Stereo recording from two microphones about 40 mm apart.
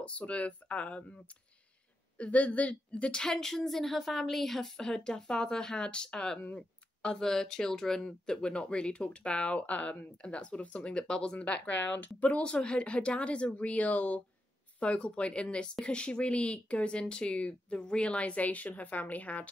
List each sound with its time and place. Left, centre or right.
0.3 s speech: left
2.3 s speech: left
3.2 s a woman's voice: centre
6.5 s a sound: left
7.2 s speech: centre; by 10.0 s left
10.2 s speech: left
12.4 s speech: left